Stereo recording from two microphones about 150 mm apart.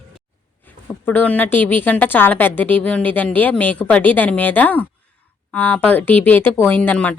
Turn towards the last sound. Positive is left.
turn(degrees=10)  # may be behind; listen again after turning